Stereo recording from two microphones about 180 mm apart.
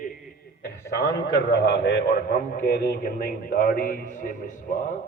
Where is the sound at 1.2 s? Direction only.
65° left (ahead or behind); by 4.9 s 45° left (ahead or behind).